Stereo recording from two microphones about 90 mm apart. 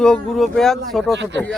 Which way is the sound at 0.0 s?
5° left (ahead or behind).